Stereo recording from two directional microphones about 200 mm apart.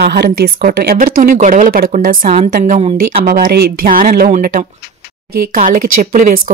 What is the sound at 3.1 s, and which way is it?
A woman's voice, 50° right (ahead or behind).